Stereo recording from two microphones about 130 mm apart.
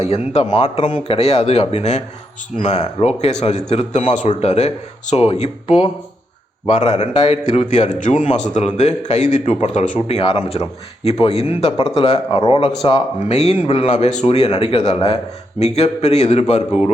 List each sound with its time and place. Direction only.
0.0 s speech: 55° left (ahead or behind)
0.6 s speech: 65° left (ahead or behind)
1.0 s speech: 50° left (ahead or behind); by 10.2 s 70° left (ahead or behind)
10.2 s speech: 45° left (ahead or behind)
13.9 s speech: 60° left (ahead or behind)